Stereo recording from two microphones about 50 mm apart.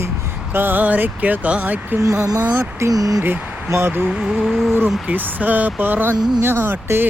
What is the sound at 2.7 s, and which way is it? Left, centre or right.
Speech, right.